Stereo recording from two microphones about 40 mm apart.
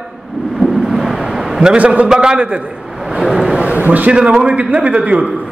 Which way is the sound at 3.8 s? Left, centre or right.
Right.